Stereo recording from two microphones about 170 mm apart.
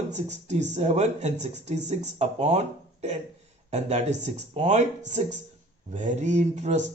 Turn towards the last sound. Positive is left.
turn(degrees=-45)  # may be behind; listen again after turning